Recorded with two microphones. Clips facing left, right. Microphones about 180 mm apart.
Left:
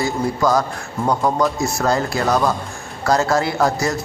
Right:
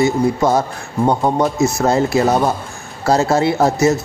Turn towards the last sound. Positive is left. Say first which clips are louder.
# right 5 dB
turn(degrees=-25)  # may be behind; listen again after turning